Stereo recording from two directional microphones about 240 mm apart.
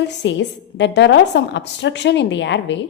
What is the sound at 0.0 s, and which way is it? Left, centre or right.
A woman's voice, left.